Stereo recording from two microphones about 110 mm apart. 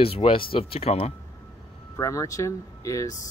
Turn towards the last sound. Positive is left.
turn(degrees=30)  # may be behind; listen again after turning